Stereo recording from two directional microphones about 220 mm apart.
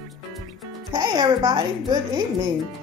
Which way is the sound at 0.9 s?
20° right (ahead or behind).